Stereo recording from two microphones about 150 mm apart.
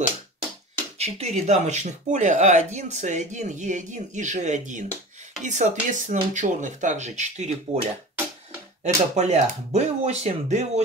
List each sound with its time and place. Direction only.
0.9 s speech: 45° right (ahead or behind)
8.8 s speech: 50° right (ahead or behind)